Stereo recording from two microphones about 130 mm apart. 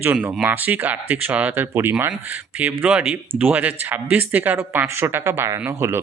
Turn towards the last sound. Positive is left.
turn(degrees=-20)  # may be behind; listen again after turning